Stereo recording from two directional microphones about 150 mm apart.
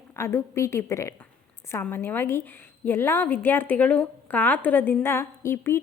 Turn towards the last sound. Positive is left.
turn(degrees=15)  # may be behind; listen again after turning